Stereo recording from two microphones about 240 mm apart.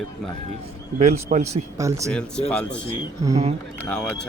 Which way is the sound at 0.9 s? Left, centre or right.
Right.